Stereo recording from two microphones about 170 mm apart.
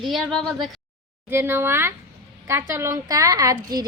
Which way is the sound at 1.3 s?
15° right (ahead or behind).